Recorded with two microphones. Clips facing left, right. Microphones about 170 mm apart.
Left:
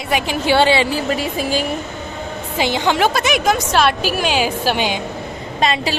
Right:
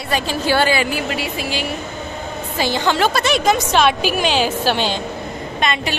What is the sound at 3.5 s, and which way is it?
A woman's voice, centre (ahead or behind).